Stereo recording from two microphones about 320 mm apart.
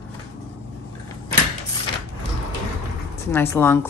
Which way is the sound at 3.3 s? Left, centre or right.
Centre.